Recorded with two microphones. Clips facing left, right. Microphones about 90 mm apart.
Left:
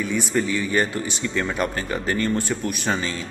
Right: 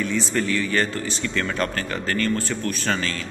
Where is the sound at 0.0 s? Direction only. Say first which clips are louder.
Left 1 dB; 10° left (ahead or behind).